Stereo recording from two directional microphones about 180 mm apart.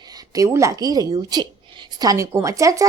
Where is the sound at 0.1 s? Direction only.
20° right (ahead or behind).